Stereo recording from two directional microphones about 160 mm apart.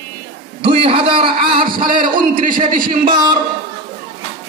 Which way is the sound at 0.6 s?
35° right (ahead or behind).